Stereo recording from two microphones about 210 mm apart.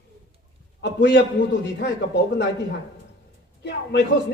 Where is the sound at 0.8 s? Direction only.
60° left (ahead or behind).